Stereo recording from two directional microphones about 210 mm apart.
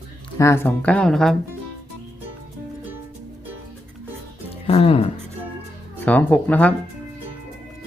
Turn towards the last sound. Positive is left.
turn(degrees=5)  # may be behind; listen again after turning